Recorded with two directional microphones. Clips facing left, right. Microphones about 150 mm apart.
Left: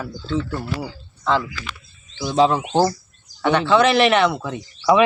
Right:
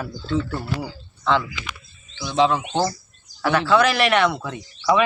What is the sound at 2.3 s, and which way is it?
Speech, 40° left (ahead or behind).